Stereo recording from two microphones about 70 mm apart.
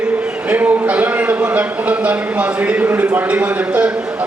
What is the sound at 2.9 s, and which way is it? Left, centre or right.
Speech, right.